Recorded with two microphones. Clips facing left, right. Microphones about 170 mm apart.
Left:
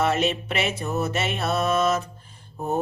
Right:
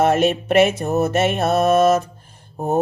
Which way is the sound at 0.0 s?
50° right (ahead or behind).